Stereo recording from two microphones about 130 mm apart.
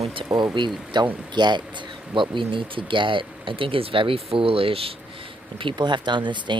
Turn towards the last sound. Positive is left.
turn(degrees=-35)  # may be behind; listen again after turning